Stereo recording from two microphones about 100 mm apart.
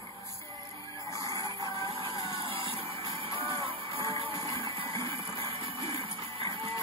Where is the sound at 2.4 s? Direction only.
60° right (ahead or behind).